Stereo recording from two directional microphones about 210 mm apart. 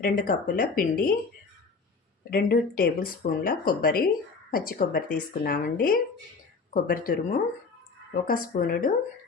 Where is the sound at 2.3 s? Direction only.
45° left (ahead or behind).